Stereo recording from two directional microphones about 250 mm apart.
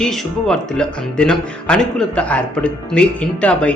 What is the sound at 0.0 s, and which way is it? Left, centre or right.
A man's voice, centre.